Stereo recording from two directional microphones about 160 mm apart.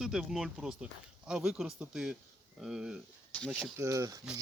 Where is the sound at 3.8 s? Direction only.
20° right (ahead or behind).